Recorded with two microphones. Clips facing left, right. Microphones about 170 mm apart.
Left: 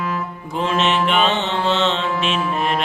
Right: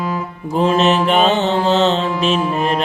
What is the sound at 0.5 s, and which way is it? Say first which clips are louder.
Music: right 5 dB; 40° right (ahead or behind).